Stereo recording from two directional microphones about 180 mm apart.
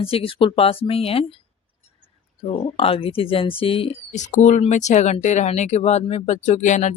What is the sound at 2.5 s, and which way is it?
Speech, 30° left (ahead or behind).